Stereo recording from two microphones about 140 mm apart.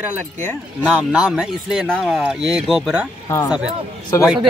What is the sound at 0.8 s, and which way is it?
Speech, 10° right (ahead or behind).